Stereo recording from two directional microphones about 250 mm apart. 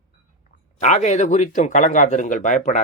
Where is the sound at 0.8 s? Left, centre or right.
Left.